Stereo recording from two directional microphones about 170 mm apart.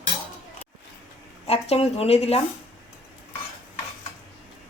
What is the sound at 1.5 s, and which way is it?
Speech, 35° left (ahead or behind).